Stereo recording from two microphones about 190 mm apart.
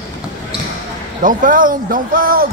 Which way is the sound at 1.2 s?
45° right (ahead or behind).